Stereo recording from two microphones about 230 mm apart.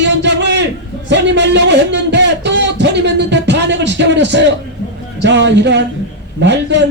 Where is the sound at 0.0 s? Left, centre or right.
Right.